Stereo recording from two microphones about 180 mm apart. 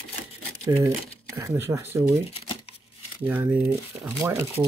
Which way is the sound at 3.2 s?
10° right (ahead or behind).